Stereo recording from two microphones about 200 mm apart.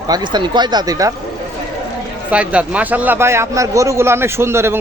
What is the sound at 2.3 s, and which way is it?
A man's voice, 5° right (ahead or behind).